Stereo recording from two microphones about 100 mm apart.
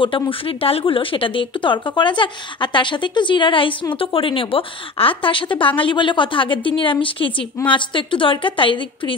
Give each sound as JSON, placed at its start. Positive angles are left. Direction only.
{"t": 0.0, "sound": "speech", "side_deg": 65}